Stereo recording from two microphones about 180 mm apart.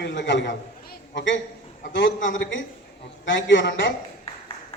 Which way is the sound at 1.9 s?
90° left.